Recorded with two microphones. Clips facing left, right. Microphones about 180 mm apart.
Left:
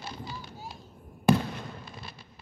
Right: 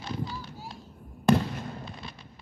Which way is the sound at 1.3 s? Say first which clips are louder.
Right 1 dB; 5° left (ahead or behind).